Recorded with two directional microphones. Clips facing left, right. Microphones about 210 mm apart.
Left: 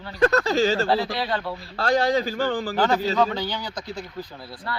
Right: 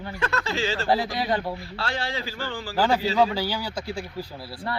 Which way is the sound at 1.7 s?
40° left (ahead or behind).